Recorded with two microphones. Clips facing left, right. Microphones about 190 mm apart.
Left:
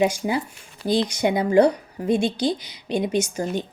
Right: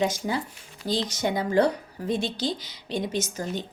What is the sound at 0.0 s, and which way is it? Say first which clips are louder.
A woman's voice: left 5 dB; 10° left (ahead or behind).